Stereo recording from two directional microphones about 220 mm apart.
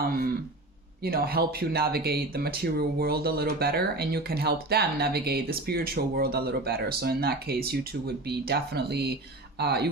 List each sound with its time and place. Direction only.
0.0 s throat clearing: 40° right (ahead or behind)
1.0 s speech: 45° right (ahead or behind)